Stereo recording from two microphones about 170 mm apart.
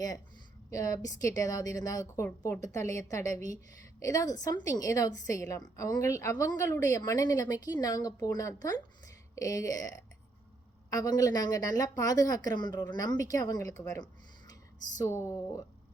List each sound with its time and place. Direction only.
0.7 s a woman's voice: 20° left (ahead or behind)